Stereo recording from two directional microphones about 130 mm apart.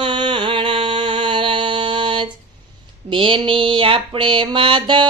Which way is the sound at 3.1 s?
40° right (ahead or behind).